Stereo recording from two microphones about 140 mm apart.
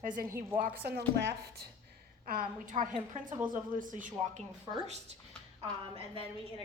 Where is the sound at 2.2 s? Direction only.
80° right.